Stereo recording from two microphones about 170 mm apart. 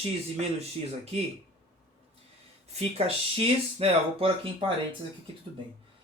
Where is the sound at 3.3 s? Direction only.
35° right (ahead or behind).